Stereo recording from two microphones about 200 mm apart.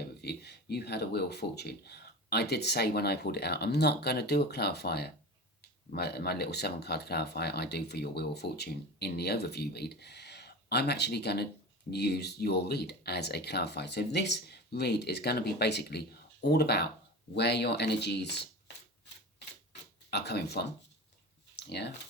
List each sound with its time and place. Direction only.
0.2 s speech: 55° left (ahead or behind)
20.1 s speech: 55° left (ahead or behind)
21.5 s a sound: 55° left (ahead or behind)